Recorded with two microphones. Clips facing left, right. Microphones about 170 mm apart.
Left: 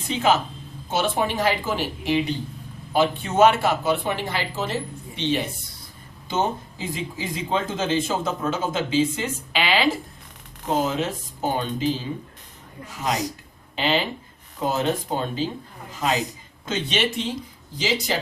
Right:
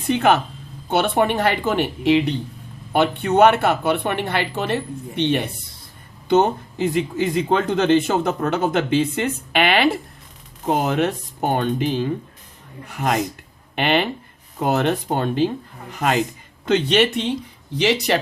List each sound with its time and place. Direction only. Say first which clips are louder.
0.1 s speech: right 4 dB; 60° right (ahead or behind)